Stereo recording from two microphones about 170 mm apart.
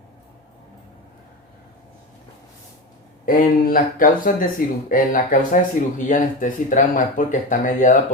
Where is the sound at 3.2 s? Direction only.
55° left (ahead or behind).